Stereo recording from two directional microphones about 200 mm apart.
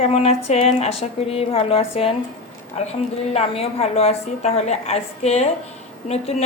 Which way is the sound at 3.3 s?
30° left (ahead or behind).